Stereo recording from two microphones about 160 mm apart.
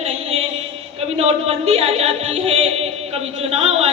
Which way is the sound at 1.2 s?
40° right (ahead or behind).